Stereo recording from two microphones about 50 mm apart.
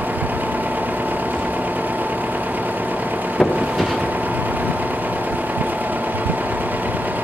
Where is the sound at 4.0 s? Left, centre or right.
Right.